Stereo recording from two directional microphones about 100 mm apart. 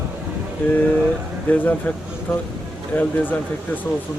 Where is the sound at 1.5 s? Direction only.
15° left (ahead or behind).